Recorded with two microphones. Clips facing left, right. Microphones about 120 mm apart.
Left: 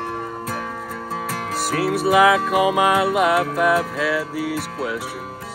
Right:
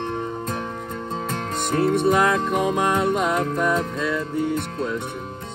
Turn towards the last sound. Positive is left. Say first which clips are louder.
# even
turn(degrees=75)  # may be behind; listen again after turning